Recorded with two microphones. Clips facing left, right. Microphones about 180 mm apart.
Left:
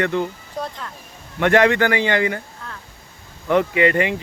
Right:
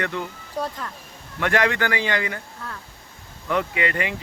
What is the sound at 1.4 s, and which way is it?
A man's voice, 25° left (ahead or behind).